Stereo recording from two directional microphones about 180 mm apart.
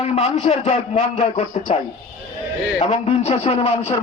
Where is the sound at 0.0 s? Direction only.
35° left (ahead or behind).